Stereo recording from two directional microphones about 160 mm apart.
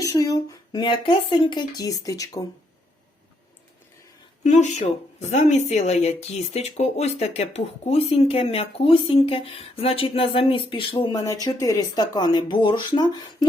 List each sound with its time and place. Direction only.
0.0 s speech: 20° left (ahead or behind)
4.4 s speech: 45° left (ahead or behind); by 13.1 s 30° left (ahead or behind)